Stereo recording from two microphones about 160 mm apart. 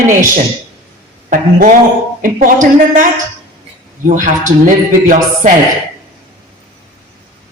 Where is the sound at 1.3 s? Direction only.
55° right (ahead or behind).